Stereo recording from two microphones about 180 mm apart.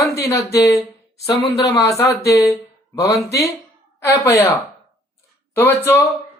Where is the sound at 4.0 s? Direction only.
15° left (ahead or behind).